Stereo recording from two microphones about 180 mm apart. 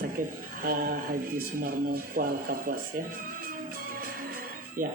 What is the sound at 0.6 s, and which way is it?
Speech, 55° right (ahead or behind).